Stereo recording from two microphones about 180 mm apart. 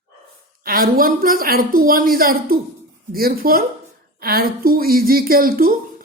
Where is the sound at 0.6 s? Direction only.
55° right (ahead or behind).